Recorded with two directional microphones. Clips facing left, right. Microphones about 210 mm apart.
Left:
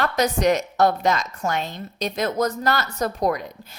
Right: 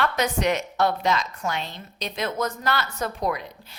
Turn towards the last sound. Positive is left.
turn(degrees=40)  # may be behind; listen again after turning